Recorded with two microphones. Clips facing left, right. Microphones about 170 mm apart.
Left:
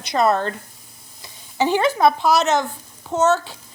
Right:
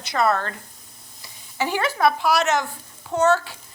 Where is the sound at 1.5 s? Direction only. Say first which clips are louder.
Left 5 dB; 25° left (ahead or behind).